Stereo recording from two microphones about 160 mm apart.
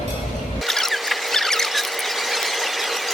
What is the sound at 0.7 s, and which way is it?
Squeal, centre (ahead or behind).